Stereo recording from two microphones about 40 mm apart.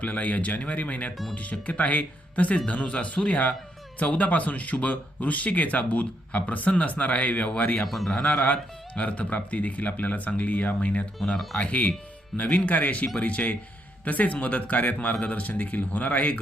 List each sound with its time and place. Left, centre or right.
0.0 s speech: left
7.9 s a man's voice: centre
8.2 s speech: left